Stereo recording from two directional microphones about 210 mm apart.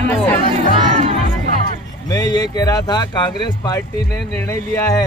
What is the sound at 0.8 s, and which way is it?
Music, 30° right (ahead or behind).